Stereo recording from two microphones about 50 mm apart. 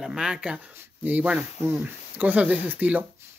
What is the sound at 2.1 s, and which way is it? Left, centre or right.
Speech, right.